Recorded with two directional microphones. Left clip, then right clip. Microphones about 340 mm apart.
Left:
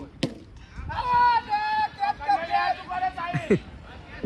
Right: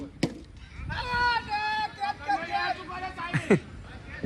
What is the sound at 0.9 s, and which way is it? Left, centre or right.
Vehicle, left.